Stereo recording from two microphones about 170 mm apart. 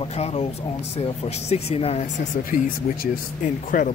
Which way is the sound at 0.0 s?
35° left (ahead or behind).